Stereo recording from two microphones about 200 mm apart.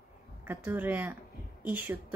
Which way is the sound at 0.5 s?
10° right (ahead or behind).